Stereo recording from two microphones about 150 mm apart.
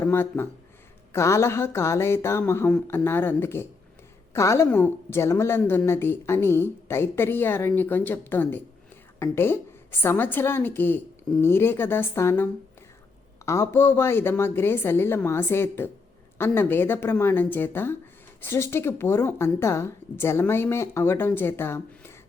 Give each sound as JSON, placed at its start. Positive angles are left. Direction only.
{"t": 0.0, "sound": "a woman's voice", "side_deg": 15}